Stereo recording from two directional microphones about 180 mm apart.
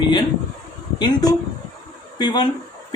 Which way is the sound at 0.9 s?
20° left (ahead or behind).